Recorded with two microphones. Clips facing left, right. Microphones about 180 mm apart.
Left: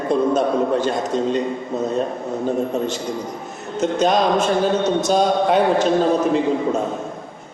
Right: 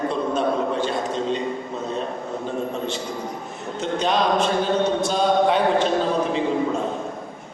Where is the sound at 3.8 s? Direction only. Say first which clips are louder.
Left 5 dB; 45° left (ahead or behind).